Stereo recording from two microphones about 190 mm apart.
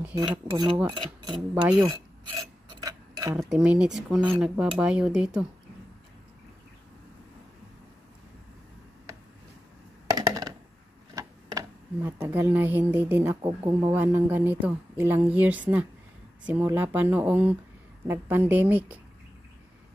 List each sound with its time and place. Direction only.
0.3 s speech: 25° right (ahead or behind)
1.5 s a woman's voice: 5° right (ahead or behind)
1.8 s a sound: 20° right (ahead or behind)
3.3 s speech: 5° right (ahead or behind)
10.1 s a sound: 20° right (ahead or behind)
11.1 s speech: 15° right (ahead or behind)
13.4 s speech: 25° right (ahead or behind)
13.9 s a woman's voice: 10° right (ahead or behind)